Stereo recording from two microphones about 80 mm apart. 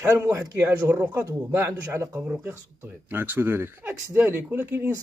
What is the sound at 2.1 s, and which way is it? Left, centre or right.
Speech, right.